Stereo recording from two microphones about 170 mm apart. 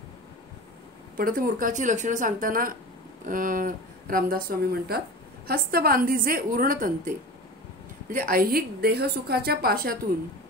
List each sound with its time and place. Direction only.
1.1 s a woman's voice: 55° right (ahead or behind)